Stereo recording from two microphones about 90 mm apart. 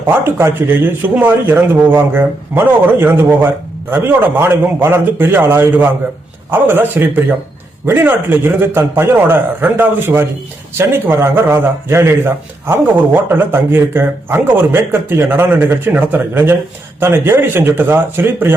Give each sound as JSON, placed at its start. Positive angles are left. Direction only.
{"t": 0.1, "sound": "a man's voice", "side_deg": -25}